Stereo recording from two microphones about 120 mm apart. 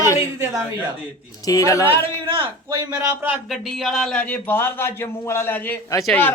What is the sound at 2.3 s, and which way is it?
Speech, 45° right (ahead or behind).